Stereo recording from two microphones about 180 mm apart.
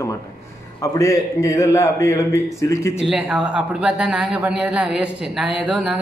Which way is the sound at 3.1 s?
5° right (ahead or behind).